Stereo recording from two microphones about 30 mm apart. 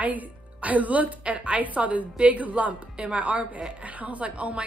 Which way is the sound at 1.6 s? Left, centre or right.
Right.